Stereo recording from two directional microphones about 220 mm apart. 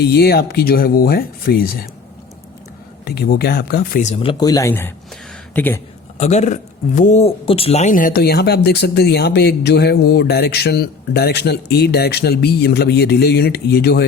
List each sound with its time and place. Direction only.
0.0 s speech: 45° left (ahead or behind)
3.0 s speech: 45° left (ahead or behind); by 5.8 s 10° left (ahead or behind)
6.1 s speech: 30° left (ahead or behind)